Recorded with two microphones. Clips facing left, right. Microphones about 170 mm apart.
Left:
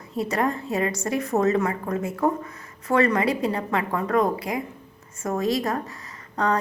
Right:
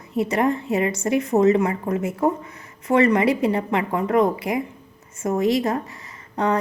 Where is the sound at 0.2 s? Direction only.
25° right (ahead or behind).